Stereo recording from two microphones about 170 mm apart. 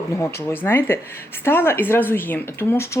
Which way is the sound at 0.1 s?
15° left (ahead or behind).